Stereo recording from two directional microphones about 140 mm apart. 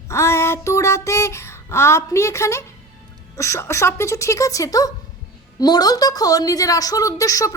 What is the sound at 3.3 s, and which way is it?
A woman's voice, 20° left (ahead or behind).